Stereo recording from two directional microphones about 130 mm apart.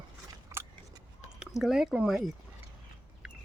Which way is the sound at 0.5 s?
20° right (ahead or behind).